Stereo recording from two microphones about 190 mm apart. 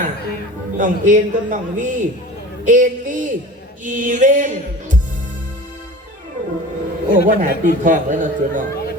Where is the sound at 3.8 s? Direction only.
40° right (ahead or behind).